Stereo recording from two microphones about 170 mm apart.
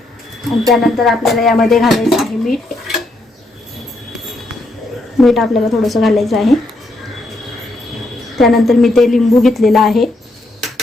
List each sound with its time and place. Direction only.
0.7 s speech: centre (ahead or behind)
5.1 s speech: centre (ahead or behind)
8.4 s speech: centre (ahead or behind)